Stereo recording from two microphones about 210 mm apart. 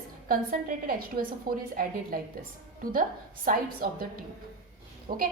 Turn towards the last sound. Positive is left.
turn(degrees=-40)  # may be behind; listen again after turning